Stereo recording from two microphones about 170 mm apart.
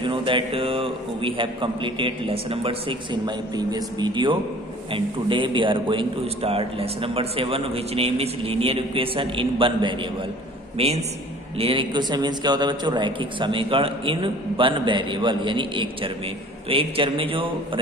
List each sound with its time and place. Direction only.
0.0 s a man's voice: 30° right (ahead or behind)